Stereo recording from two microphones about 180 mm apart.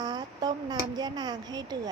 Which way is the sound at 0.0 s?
20° right (ahead or behind).